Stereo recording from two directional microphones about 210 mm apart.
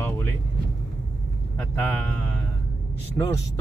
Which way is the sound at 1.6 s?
10° left (ahead or behind).